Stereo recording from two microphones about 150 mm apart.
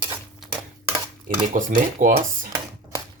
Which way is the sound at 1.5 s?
60° right (ahead or behind).